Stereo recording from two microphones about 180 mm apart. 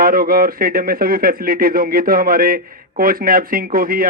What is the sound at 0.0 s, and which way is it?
Speech, 55° right (ahead or behind).